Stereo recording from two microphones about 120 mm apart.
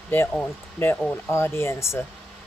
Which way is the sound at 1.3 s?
20° left (ahead or behind).